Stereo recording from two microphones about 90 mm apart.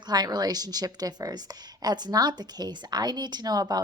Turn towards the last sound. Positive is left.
turn(degrees=-45)  # may be behind; listen again after turning